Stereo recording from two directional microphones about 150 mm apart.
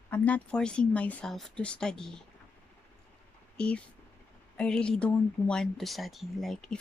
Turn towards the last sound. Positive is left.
turn(degrees=0)  # may be behind; listen again after turning